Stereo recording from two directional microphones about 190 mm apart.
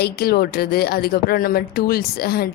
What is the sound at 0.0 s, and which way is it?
Speech, 55° left (ahead or behind).